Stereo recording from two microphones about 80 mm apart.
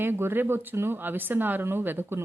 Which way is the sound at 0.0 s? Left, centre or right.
Right.